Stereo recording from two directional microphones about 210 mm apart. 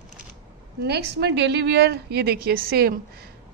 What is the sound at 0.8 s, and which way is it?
A woman's voice, 50° right (ahead or behind).